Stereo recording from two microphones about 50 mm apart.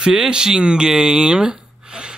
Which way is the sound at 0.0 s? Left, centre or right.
Centre.